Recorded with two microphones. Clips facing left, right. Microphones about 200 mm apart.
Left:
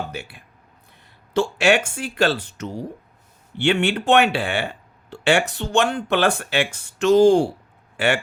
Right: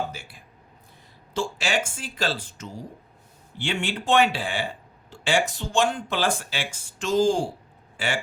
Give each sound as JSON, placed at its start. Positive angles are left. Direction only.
{"t": 0.1, "sound": "speech", "side_deg": 65}